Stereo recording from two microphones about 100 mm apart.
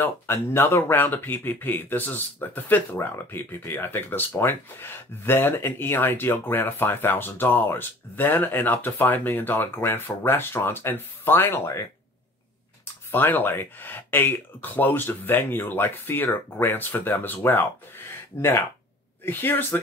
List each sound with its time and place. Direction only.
0.0 s speech: 25° left (ahead or behind)
13.1 s speech: 20° left (ahead or behind)